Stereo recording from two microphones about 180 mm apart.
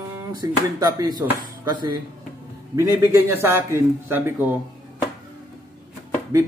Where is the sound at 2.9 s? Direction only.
10° right (ahead or behind).